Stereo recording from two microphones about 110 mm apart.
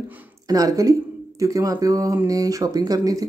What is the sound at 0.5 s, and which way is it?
A woman's voice, 35° right (ahead or behind).